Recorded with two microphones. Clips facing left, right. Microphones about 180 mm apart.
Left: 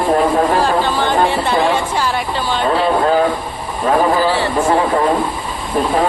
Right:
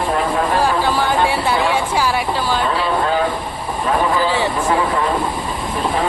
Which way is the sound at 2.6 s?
50° left (ahead or behind).